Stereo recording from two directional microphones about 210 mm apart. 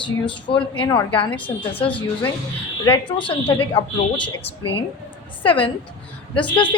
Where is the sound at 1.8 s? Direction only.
25° left (ahead or behind).